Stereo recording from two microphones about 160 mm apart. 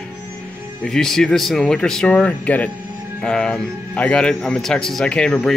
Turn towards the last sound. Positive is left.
turn(degrees=0)  # may be behind; listen again after turning